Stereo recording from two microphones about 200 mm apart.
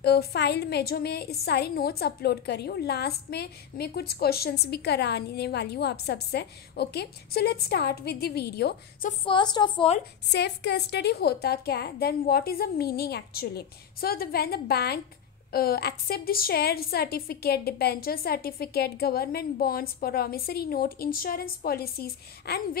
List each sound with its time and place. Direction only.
0.0 s a woman's voice: 55° left (ahead or behind)
9.2 s a woman's voice: 25° left (ahead or behind)
10.3 s a woman's voice: 60° left (ahead or behind)